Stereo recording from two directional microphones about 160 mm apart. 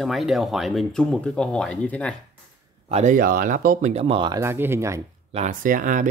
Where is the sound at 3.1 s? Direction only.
60° right (ahead or behind); by 4.4 s 30° right (ahead or behind).